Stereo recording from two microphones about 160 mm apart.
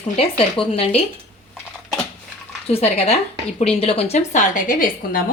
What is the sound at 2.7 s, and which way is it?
Speech, 40° left (ahead or behind).